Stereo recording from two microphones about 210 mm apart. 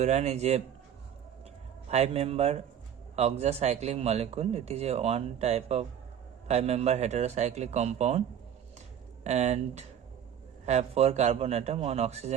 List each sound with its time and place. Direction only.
0.0 s a man's voice: 30° right (ahead or behind)
1.9 s a man's voice: 30° right (ahead or behind)
9.2 s a man's voice: 35° right (ahead or behind)